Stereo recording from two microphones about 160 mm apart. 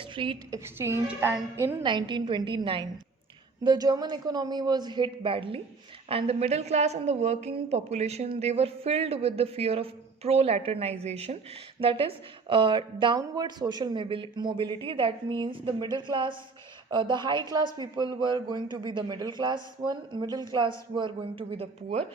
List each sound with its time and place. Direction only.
0.0 s a woman's voice: 30° right (ahead or behind)
0.6 s a woman's voice: 15° right (ahead or behind)
1.8 s a woman's voice: 30° right (ahead or behind)